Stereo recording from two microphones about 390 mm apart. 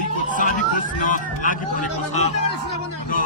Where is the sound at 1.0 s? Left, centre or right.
Centre.